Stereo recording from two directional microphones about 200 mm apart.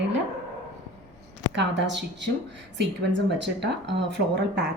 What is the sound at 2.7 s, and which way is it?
Speech, 60° right (ahead or behind).